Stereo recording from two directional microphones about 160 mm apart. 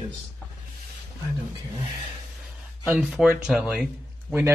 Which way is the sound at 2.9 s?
5° right (ahead or behind).